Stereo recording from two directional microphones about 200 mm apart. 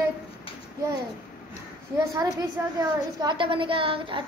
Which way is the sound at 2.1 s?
15° right (ahead or behind).